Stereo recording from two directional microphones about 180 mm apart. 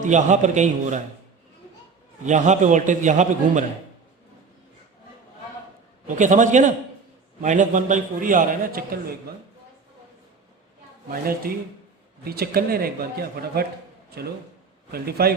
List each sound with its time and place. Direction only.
0.0 s a man's voice: 40° right (ahead or behind)
2.2 s a man's voice: 40° right (ahead or behind)
6.1 s a man's voice: 45° right (ahead or behind)
11.1 s a man's voice: 55° right (ahead or behind)
14.9 s speech: 60° right (ahead or behind)